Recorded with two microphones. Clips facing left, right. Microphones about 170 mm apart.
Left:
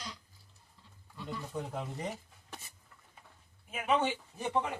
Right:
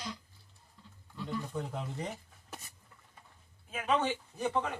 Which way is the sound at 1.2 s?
Centre (ahead or behind).